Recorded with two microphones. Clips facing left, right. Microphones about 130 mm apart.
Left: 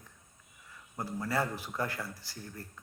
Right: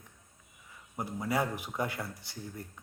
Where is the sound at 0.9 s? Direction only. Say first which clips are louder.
Right 1 dB; 15° right (ahead or behind).